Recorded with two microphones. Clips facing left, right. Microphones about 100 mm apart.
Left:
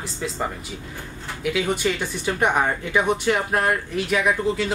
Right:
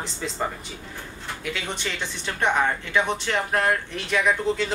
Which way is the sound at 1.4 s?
5° left (ahead or behind).